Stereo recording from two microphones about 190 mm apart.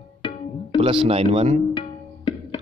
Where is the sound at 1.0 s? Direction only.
30° right (ahead or behind).